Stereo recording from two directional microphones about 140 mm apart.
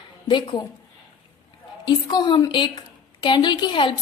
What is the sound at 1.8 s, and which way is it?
A woman's voice, 30° left (ahead or behind).